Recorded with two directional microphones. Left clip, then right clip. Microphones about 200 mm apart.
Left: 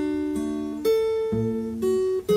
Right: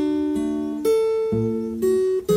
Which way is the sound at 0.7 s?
10° right (ahead or behind).